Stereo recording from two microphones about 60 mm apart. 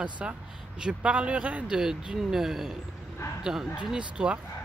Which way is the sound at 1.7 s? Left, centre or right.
Centre.